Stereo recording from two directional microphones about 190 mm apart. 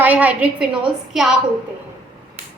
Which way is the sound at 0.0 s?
10° right (ahead or behind).